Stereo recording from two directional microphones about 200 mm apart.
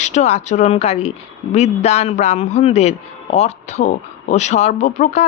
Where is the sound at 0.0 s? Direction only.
35° left (ahead or behind).